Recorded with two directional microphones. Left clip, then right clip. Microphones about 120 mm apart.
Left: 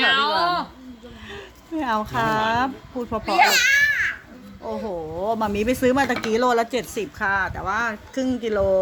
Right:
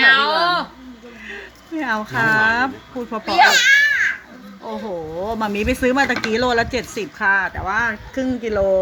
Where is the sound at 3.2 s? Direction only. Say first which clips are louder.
Right 4 dB; centre (ahead or behind).